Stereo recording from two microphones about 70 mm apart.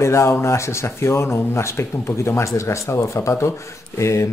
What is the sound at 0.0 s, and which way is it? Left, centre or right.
Speech, left.